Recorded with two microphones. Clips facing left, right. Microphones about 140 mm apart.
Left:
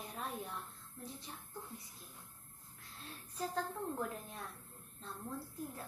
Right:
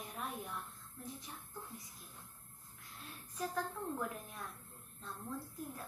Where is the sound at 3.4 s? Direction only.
30° left (ahead or behind).